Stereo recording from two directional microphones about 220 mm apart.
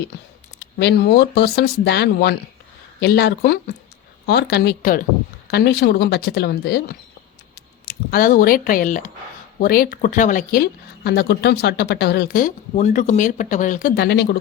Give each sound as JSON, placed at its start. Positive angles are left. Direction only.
{"t": 0.6, "sound": "speech", "side_deg": 50}